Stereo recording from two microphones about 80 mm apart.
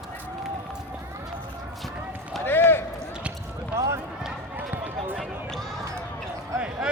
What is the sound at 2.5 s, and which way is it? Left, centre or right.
Run, left.